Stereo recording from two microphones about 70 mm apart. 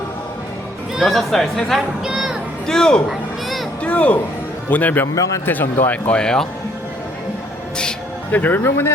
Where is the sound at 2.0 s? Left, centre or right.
Centre.